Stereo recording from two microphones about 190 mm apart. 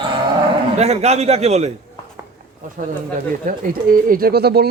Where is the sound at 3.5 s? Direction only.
45° right (ahead or behind).